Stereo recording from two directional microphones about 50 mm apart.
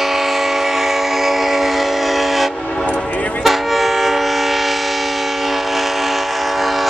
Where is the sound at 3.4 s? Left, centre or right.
Centre.